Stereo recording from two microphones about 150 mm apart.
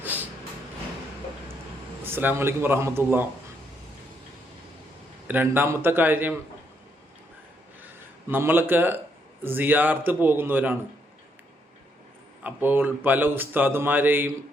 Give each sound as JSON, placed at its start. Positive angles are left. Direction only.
{"t": 2.0, "sound": "speech", "side_deg": -15}
{"t": 5.3, "sound": "speech", "side_deg": -10}
{"t": 8.3, "sound": "speech", "side_deg": -15}
{"t": 12.4, "sound": "speech", "side_deg": -10}